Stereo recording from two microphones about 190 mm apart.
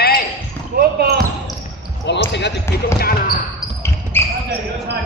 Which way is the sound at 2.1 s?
65° left (ahead or behind).